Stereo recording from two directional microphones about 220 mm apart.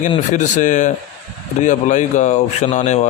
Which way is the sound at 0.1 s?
30° left (ahead or behind).